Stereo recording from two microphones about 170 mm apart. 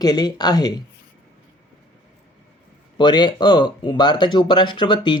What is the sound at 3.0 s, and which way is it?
Speech, 25° left (ahead or behind).